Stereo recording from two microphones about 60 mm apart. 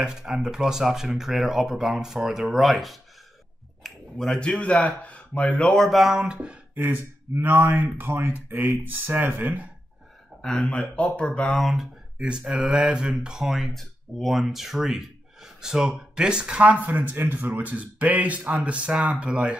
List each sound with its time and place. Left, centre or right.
0.0 s speech: centre
5.8 s speech: centre
6.7 s speech: right
10.4 s speech: centre
11.5 s speech: centre
12.2 s speech: centre